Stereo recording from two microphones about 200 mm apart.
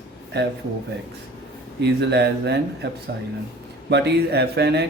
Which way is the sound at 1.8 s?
55° right (ahead or behind).